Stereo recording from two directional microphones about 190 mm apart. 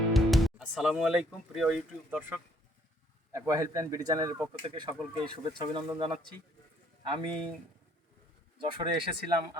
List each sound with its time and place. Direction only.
0.1 s speech: centre (ahead or behind); by 4.4 s 15° right (ahead or behind)
4.6 s speech: 25° right (ahead or behind)
8.6 s speech: 25° right (ahead or behind)